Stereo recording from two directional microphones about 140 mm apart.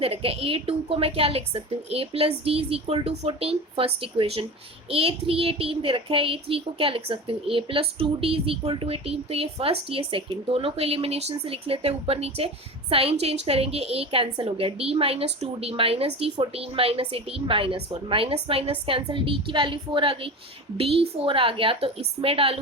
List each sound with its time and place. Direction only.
0.0 s a woman's voice: 45° right (ahead or behind)